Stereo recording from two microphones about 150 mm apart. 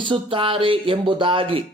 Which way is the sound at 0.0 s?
35° right (ahead or behind).